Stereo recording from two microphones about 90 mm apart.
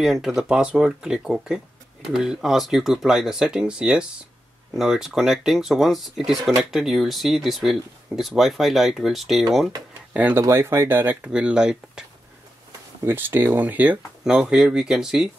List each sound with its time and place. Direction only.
0.0 s speech: 5° right (ahead or behind)
10.1 s speech: 20° right (ahead or behind)
11.2 s speech: 10° right (ahead or behind)
13.0 s speech: 25° right (ahead or behind)
14.2 s speech: 10° right (ahead or behind)